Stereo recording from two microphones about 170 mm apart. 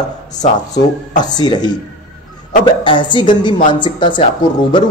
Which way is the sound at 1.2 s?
25° left (ahead or behind).